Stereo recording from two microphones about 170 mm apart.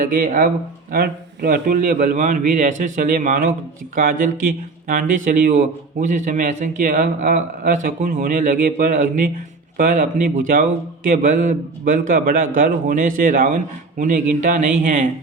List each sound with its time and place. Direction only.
0.0 s a man's voice: 55° right (ahead or behind)